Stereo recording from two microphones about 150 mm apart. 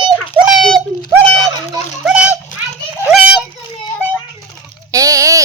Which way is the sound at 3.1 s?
10° right (ahead or behind).